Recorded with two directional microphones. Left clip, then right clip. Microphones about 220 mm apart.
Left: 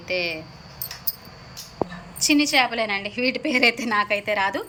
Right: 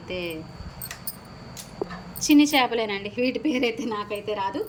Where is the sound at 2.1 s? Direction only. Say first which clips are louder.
Even; 5° right (ahead or behind).